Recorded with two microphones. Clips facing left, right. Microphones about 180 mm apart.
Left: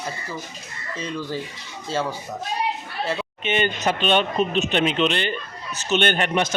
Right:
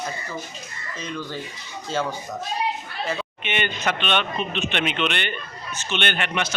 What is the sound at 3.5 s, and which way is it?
A man's voice, 40° left (ahead or behind).